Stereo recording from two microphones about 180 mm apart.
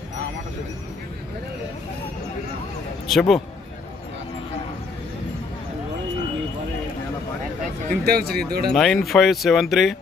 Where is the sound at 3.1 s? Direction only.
Centre (ahead or behind).